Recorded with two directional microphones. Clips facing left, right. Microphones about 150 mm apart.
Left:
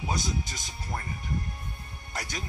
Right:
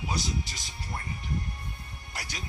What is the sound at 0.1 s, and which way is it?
Speech, 45° left (ahead or behind).